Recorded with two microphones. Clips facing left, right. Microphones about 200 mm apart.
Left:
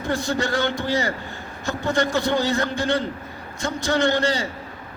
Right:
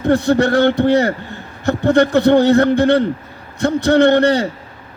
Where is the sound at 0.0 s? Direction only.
60° right (ahead or behind).